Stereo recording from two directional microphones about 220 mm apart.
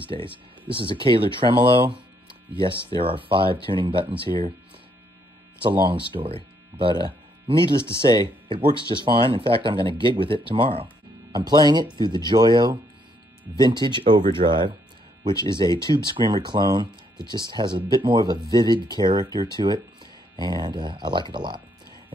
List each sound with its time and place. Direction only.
0.0 s speech: 25° right (ahead or behind)
5.6 s speech: 20° right (ahead or behind)